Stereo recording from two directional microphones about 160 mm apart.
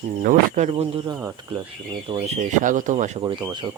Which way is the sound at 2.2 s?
50° right (ahead or behind).